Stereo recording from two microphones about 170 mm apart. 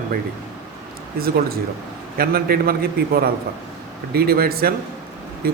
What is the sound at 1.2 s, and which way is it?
Speech, 60° right (ahead or behind).